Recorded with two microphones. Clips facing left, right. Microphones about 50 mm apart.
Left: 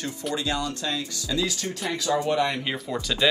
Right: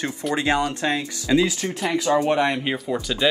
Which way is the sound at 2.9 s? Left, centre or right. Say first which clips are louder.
Even; centre.